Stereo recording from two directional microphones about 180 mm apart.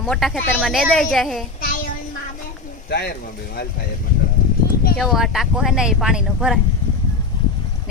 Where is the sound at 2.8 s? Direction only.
60° left (ahead or behind).